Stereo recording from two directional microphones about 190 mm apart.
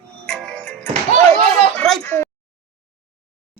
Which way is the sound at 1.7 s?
5° left (ahead or behind).